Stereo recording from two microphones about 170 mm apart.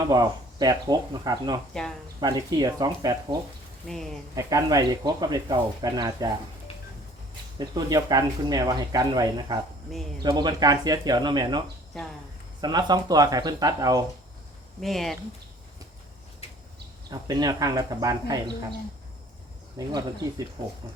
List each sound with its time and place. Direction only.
0.0 s speech: 25° right (ahead or behind)
1.7 s speech: 5° left (ahead or behind)
2.2 s speech: 20° right (ahead or behind)
3.8 s speech: centre (ahead or behind)
4.4 s speech: 20° right (ahead or behind)
7.6 s speech: 25° right (ahead or behind)
12.6 s speech: 25° right (ahead or behind)
14.8 s speech: centre (ahead or behind)
17.1 s speech: 25° right (ahead or behind)
19.8 s speech: 20° right (ahead or behind)